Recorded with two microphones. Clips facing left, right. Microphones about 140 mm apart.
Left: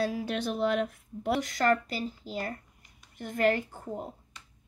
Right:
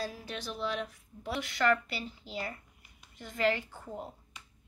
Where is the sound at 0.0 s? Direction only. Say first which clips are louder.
Left 9 dB; 65° left (ahead or behind); by 4.0 s 45° left (ahead or behind).